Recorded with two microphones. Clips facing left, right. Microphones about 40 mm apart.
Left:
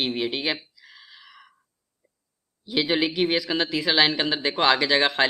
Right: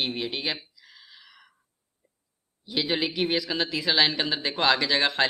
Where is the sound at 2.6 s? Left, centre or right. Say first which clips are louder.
Left 4 dB; centre.